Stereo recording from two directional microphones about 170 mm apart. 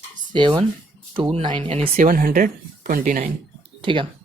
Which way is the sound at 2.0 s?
55° right (ahead or behind).